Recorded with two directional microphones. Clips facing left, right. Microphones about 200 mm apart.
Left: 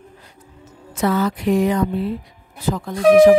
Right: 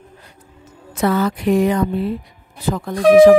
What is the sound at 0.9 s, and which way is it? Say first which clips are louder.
A woman's voice: right 1 dB; 60° right (ahead or behind).